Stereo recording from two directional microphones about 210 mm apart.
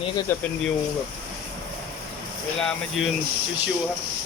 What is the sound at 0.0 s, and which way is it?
Speech, 20° left (ahead or behind).